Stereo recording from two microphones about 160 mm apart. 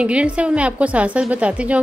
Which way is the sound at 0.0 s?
5° right (ahead or behind).